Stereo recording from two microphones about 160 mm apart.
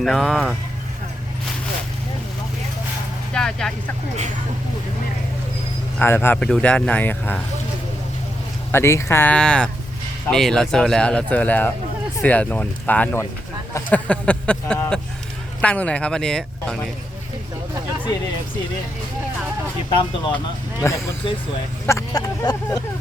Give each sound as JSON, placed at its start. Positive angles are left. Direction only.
{"t": 0.0, "sound": "speech", "side_deg": 0}
{"t": 3.3, "sound": "speech", "side_deg": 5}
{"t": 6.0, "sound": "speech", "side_deg": 15}
{"t": 8.7, "sound": "speech", "side_deg": 15}
{"t": 19.9, "sound": "speech", "side_deg": 30}
{"t": 20.8, "sound": "speech", "side_deg": 20}
{"t": 21.8, "sound": "a sound", "side_deg": 20}